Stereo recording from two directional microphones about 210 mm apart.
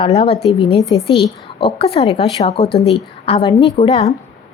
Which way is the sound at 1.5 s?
25° left (ahead or behind).